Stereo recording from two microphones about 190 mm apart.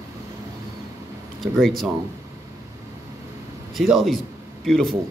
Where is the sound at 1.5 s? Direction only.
Centre (ahead or behind).